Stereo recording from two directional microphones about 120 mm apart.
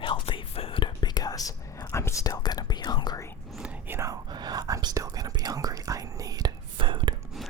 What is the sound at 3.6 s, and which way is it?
Whispering, 20° right (ahead or behind).